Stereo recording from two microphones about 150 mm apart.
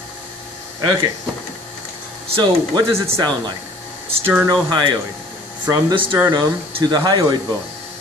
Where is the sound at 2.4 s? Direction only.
30° right (ahead or behind).